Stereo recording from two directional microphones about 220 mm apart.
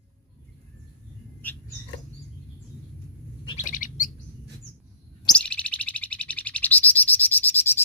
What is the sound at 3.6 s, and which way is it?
Bird, 35° left (ahead or behind).